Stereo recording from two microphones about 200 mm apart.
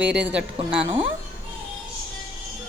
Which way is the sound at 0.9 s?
30° right (ahead or behind).